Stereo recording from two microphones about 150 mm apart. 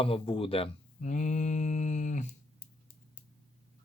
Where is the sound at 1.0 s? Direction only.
55° left (ahead or behind).